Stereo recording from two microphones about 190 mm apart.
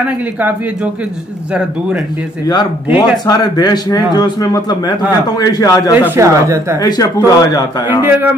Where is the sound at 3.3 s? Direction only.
20° left (ahead or behind).